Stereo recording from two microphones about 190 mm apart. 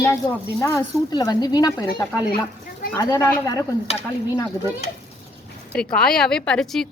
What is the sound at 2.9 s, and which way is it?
Speech, 15° left (ahead or behind).